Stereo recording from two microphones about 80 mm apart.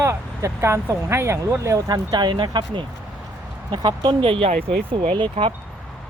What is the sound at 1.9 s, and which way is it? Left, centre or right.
Speech, right.